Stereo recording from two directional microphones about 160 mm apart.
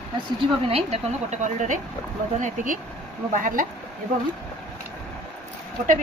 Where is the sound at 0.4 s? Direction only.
40° right (ahead or behind); by 3.6 s 55° right (ahead or behind).